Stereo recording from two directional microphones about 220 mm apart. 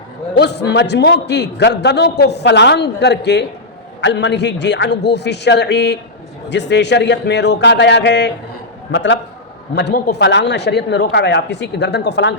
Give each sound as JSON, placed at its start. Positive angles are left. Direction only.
{"t": 0.3, "sound": "a man's voice", "side_deg": 50}